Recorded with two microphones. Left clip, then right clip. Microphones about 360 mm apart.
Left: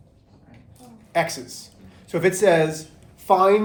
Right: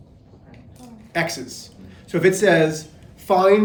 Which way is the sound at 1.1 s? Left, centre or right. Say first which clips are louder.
Left 1 dB; centre.